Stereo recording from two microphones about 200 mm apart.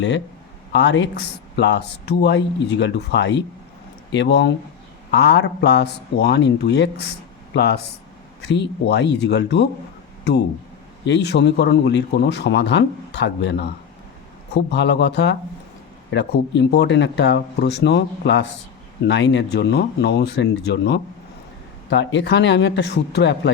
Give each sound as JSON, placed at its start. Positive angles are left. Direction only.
{"t": 0.7, "sound": "speech", "side_deg": 60}
{"t": 11.0, "sound": "speech", "side_deg": 60}